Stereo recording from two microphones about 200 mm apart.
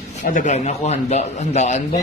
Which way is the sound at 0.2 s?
40° left (ahead or behind).